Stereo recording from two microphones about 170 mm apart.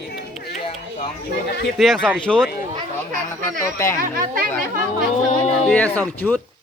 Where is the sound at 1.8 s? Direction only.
Centre (ahead or behind).